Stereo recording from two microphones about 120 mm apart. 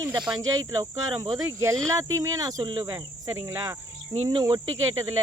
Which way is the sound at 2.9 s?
25° right (ahead or behind).